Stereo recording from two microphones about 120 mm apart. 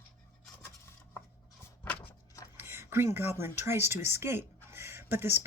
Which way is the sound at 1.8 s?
15° left (ahead or behind).